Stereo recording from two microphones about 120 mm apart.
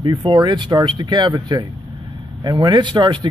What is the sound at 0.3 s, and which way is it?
Speech, 40° right (ahead or behind).